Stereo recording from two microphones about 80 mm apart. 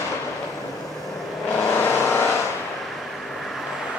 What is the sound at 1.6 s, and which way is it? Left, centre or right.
Vehicle, left.